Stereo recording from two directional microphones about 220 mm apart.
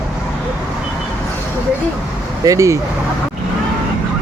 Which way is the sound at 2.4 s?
15° right (ahead or behind).